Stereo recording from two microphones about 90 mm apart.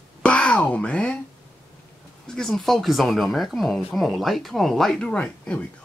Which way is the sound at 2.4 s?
5° left (ahead or behind).